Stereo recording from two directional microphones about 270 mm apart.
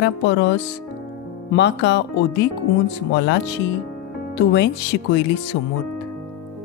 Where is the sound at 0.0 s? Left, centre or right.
Left.